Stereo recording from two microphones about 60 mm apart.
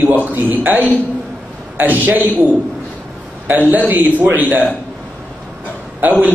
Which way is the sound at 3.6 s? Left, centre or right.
Right.